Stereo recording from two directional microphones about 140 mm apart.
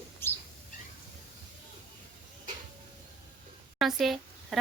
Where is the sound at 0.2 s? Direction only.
15° left (ahead or behind).